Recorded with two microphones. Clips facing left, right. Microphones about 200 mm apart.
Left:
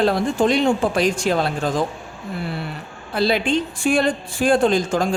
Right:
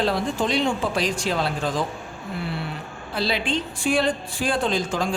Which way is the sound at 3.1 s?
50° left (ahead or behind).